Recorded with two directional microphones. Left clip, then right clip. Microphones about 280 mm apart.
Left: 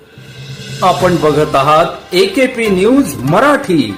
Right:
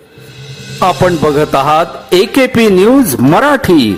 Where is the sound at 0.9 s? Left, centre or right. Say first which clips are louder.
Even; right.